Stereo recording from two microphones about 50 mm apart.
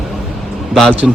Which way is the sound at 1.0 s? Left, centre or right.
Centre.